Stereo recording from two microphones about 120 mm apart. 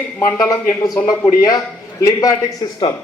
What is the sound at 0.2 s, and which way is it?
A man's voice, 30° left (ahead or behind).